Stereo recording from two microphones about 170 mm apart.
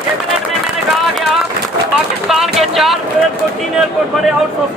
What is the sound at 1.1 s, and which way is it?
Speech, centre (ahead or behind).